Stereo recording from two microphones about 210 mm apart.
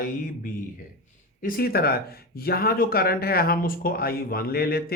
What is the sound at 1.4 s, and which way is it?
Speech, 45° left (ahead or behind).